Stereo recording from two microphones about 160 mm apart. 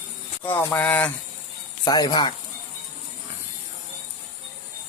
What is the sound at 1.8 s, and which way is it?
Speech, 25° left (ahead or behind).